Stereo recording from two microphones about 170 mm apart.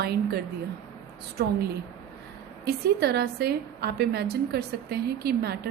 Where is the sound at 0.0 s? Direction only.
70° right (ahead or behind).